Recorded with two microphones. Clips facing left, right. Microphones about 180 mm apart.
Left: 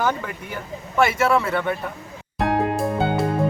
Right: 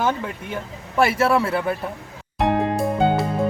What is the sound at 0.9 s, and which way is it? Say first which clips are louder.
Speech: right 1 dB; 35° right (ahead or behind).